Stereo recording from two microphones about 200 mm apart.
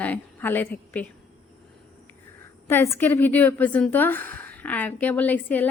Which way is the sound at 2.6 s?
10° left (ahead or behind).